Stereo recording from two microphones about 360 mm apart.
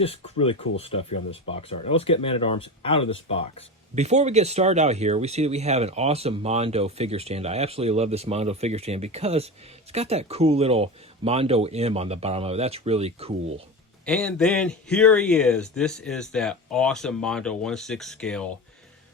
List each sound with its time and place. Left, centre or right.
0.0 s speech: centre
3.9 s speech: centre
14.0 s a man's voice: centre